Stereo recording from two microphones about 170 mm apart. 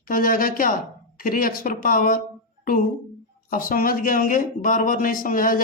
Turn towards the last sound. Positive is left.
turn(degrees=55)  # may be behind; listen again after turning